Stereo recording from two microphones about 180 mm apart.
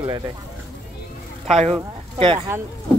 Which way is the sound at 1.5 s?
35° right (ahead or behind).